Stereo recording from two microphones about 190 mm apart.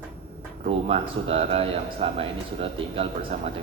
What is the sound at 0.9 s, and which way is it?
Speech, 30° right (ahead or behind).